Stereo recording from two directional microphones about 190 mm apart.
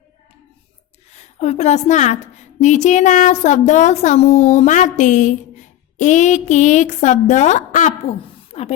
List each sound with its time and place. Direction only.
1.1 s a woman's voice: 35° left (ahead or behind)